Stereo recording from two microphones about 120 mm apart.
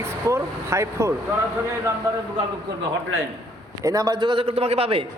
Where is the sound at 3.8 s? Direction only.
30° right (ahead or behind); by 5.0 s 55° right (ahead or behind).